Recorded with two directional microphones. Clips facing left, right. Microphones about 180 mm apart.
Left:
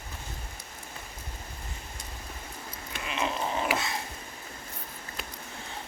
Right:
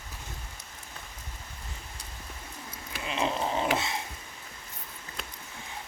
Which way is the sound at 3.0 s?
30° right (ahead or behind).